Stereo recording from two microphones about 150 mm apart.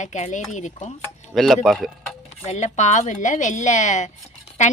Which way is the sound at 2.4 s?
50° left (ahead or behind).